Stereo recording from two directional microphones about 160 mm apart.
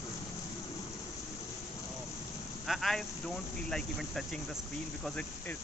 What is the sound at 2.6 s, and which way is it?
Speech, centre (ahead or behind).